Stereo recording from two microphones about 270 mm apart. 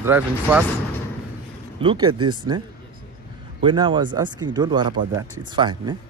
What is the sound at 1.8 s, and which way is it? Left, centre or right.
Speech, centre.